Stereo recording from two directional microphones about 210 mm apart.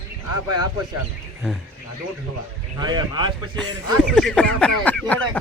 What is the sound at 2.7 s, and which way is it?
Speech, 20° right (ahead or behind).